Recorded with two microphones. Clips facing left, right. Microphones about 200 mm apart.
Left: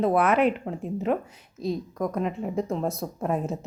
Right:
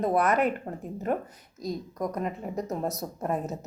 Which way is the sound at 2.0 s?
Centre (ahead or behind).